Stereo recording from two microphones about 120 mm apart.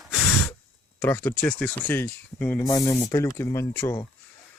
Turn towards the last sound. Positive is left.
turn(degrees=20)  # may be behind; listen again after turning